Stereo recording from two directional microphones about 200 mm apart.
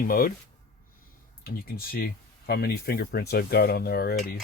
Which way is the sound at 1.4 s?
50° left (ahead or behind).